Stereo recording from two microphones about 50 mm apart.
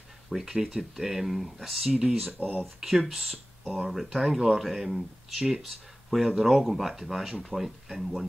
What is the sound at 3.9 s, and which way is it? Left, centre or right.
Speech, centre.